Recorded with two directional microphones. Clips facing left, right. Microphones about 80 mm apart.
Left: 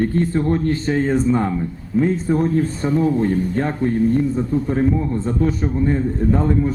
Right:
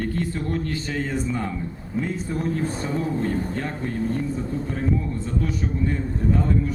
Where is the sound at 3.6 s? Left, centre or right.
Left.